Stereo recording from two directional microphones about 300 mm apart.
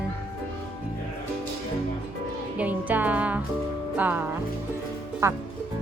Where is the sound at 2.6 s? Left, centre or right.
Centre.